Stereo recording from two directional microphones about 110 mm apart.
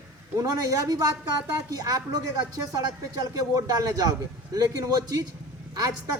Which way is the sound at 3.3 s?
35° right (ahead or behind).